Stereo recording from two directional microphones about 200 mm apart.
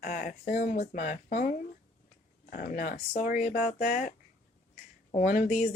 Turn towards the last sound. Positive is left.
turn(degrees=40)  # may be behind; listen again after turning